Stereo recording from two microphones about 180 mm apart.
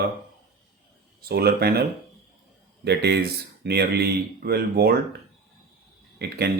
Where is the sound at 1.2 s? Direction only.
60° right (ahead or behind).